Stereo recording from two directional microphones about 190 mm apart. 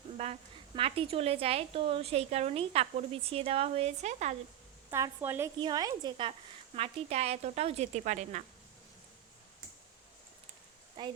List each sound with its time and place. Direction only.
0.2 s a woman's voice: 35° right (ahead or behind)
4.9 s a woman's voice: 15° right (ahead or behind); by 8.4 s 40° right (ahead or behind)
11.0 s speech: 20° right (ahead or behind)